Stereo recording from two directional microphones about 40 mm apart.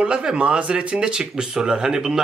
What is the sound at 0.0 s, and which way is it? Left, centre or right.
Speech, right.